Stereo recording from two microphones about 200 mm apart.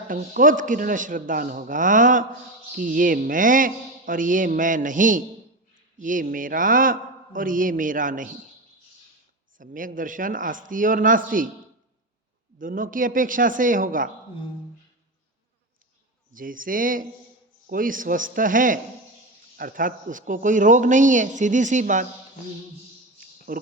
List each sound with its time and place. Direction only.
0.1 s speech: 45° right (ahead or behind)
9.6 s speech: 45° right (ahead or behind)
12.5 s speech: 45° right (ahead or behind)
16.3 s speech: 45° right (ahead or behind)
23.5 s speech: 45° right (ahead or behind)